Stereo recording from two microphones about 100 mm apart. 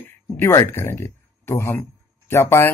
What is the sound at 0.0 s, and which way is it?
Speech, 25° left (ahead or behind).